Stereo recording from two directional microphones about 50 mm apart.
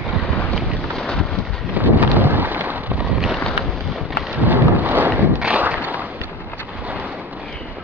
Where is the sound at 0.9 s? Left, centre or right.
Centre.